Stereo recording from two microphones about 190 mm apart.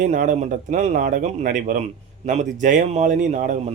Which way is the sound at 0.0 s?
40° right (ahead or behind).